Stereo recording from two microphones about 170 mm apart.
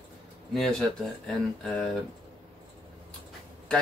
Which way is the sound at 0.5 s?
Centre (ahead or behind).